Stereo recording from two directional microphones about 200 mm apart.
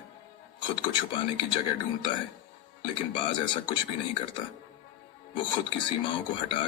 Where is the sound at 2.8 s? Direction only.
25° left (ahead or behind).